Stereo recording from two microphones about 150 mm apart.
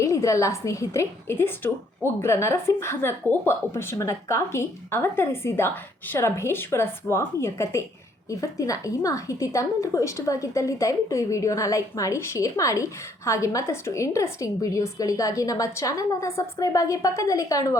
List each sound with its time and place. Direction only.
0.0 s a woman's voice: 20° left (ahead or behind)